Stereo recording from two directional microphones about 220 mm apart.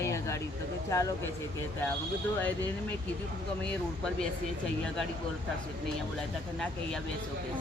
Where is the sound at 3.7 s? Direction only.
5° left (ahead or behind).